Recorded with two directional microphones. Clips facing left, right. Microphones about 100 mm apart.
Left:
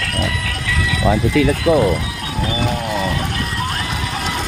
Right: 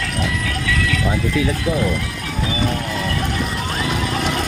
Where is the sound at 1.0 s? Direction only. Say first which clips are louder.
Left 8 dB; 90° left.